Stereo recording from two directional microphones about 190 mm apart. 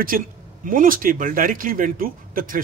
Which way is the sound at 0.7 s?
45° right (ahead or behind).